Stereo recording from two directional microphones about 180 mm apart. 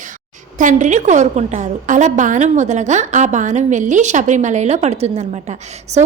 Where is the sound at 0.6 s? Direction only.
45° right (ahead or behind).